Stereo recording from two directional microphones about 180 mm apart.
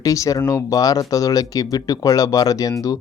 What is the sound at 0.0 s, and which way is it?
Speech, 20° left (ahead or behind).